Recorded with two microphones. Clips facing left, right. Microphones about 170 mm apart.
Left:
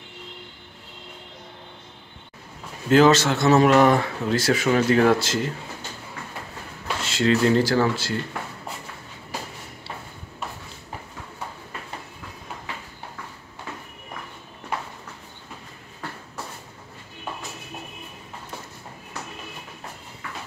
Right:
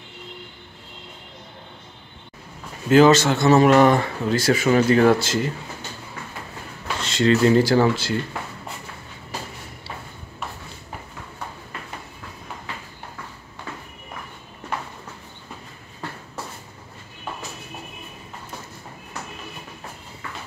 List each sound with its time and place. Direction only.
2.9 s speech: centre (ahead or behind)
7.0 s a sound: 5° left (ahead or behind)
7.5 s speech: 15° right (ahead or behind)